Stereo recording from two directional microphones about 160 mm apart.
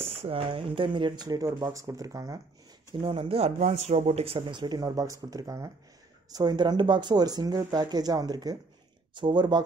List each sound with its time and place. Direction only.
0.2 s speech: 35° right (ahead or behind)
3.0 s speech: 35° right (ahead or behind)